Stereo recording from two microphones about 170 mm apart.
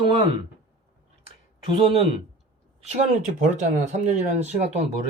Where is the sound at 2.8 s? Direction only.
40° right (ahead or behind).